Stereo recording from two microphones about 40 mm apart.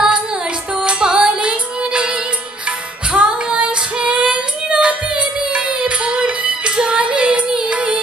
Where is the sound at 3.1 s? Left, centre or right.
Right.